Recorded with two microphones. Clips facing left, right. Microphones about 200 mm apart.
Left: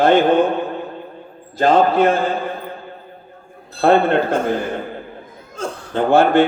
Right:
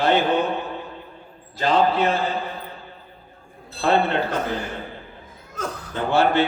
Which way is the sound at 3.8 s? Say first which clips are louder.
Left 6 dB; 50° left (ahead or behind).